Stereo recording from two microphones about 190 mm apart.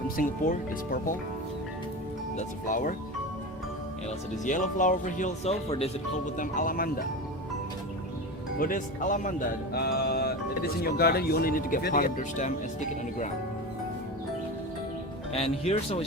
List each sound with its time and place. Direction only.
0.2 s speech: 50° left (ahead or behind)
2.6 s speech: 45° left (ahead or behind)
4.4 s speech: 40° left (ahead or behind)
6.3 s speech: 45° left (ahead or behind)
8.5 s speech: 45° left (ahead or behind)
9.7 s a sound: 55° left (ahead or behind)
10.8 s speech: 55° left (ahead or behind)
15.3 s speech: 30° left (ahead or behind)